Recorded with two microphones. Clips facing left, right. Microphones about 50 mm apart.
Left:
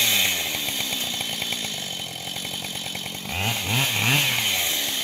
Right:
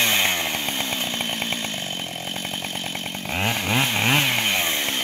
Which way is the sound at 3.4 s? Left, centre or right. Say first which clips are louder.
Right 3 dB; right.